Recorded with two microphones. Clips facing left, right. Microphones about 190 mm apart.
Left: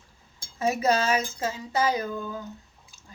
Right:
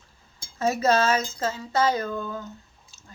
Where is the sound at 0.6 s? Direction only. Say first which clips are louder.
Right 2 dB; 15° left (ahead or behind).